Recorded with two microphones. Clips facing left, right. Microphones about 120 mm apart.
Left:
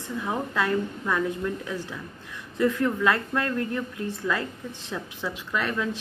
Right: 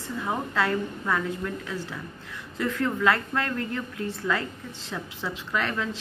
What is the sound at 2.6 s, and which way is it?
A woman's voice, 20° left (ahead or behind).